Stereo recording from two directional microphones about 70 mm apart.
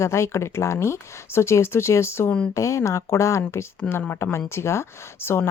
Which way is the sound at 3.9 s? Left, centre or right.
Left.